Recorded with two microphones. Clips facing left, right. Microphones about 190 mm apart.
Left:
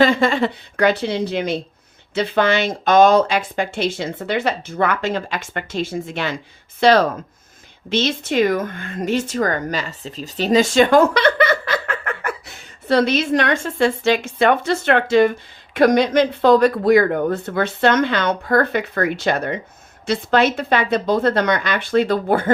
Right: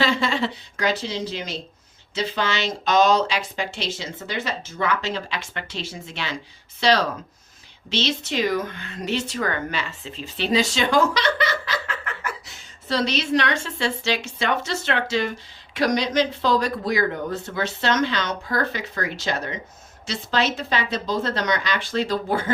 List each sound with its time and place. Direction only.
0.0 s speech: 50° left (ahead or behind)